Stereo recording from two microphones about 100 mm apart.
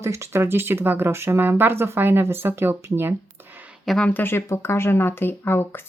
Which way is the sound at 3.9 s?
10° left (ahead or behind).